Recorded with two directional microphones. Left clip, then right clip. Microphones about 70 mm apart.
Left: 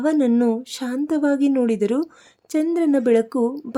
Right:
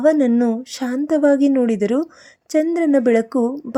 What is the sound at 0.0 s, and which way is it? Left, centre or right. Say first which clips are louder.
A woman's voice: right 4 dB; right.